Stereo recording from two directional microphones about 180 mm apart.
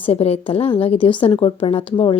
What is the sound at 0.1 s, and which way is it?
A woman's voice, 35° left (ahead or behind).